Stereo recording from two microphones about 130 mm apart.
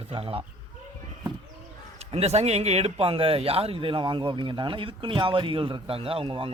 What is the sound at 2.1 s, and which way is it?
Speech, 50° right (ahead or behind).